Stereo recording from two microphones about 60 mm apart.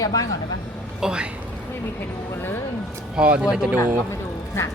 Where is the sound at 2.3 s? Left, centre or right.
Left.